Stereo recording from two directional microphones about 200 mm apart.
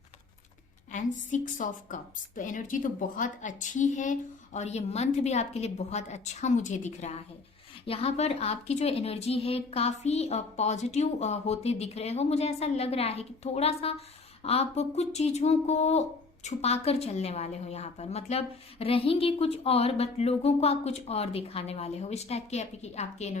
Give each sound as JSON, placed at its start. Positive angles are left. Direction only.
{"t": 0.9, "sound": "speech", "side_deg": 40}